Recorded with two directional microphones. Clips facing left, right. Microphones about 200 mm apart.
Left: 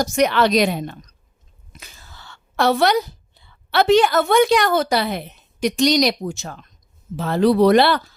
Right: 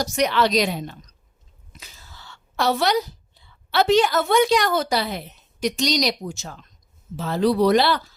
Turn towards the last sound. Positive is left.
turn(degrees=60)  # may be behind; listen again after turning